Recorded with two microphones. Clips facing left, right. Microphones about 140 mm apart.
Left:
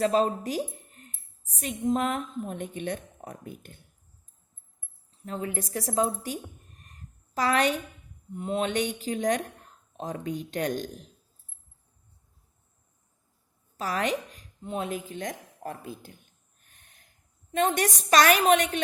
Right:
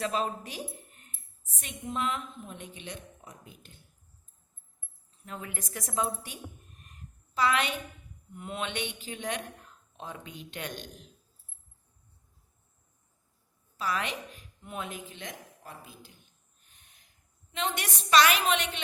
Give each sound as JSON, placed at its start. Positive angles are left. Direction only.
{"t": 0.0, "sound": "a woman's voice", "side_deg": 35}
{"t": 5.2, "sound": "a woman's voice", "side_deg": 35}
{"t": 13.7, "sound": "a sound", "side_deg": 40}
{"t": 17.5, "sound": "a woman's voice", "side_deg": 50}